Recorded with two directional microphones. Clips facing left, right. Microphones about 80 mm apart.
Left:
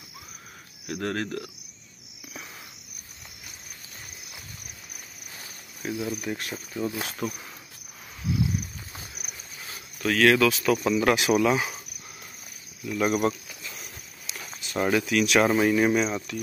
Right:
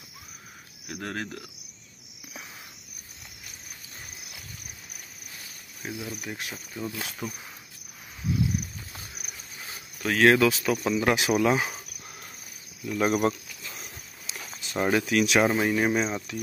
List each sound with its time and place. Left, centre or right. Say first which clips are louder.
0.8 s cricket: left 5 dB; centre
5.8 s cricket: left 5 dB; centre
6.2 s speech: left 4 dB; centre
6.5 s speech: left 5 dB; centre
7.1 s cricket: left 4 dB; centre
10.0 s speech: even; right
12.9 s speech: even; right
14.3 s a sound: left 1 dB; centre
14.9 s speech: even; right
15.4 s speech: left 2 dB; centre
15.9 s speech: left 2 dB; right